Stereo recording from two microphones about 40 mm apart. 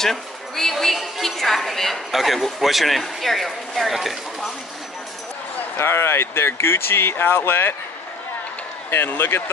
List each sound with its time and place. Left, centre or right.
0.0 s a woman's voice: centre
5.8 s speech: left
8.9 s speech: left